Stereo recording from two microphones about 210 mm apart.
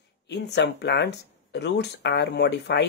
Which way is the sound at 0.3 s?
55° left (ahead or behind).